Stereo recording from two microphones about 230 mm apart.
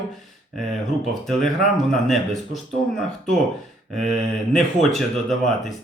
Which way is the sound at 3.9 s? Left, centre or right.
Centre.